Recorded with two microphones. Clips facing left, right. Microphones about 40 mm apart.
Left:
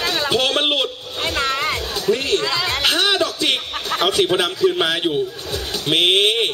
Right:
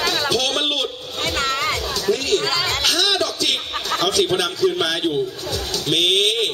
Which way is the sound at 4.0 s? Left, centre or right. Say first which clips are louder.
Left 2 dB; centre.